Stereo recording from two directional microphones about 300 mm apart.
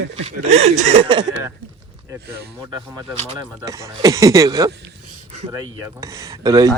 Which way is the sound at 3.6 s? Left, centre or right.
Centre.